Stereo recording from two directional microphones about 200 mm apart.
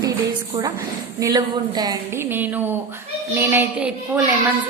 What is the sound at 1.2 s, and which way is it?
A woman's voice, 20° right (ahead or behind).